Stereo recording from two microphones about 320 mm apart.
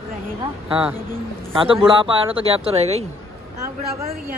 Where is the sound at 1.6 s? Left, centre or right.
Centre.